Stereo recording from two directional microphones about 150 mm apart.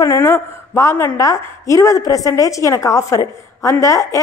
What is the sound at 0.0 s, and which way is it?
A woman's voice, 20° left (ahead or behind).